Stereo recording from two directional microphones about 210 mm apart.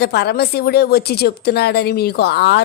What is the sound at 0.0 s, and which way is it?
A woman's voice, 50° left (ahead or behind).